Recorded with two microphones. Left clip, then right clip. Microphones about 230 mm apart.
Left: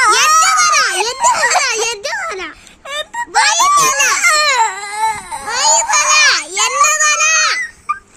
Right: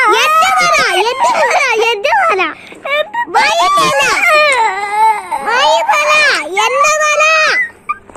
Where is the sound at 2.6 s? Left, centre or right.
Centre.